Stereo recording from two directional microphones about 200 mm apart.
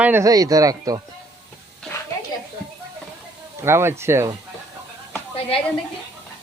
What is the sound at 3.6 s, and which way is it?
Speech, 10° right (ahead or behind).